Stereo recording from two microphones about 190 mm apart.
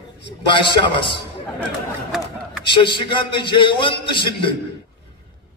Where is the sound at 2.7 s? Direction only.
25° left (ahead or behind).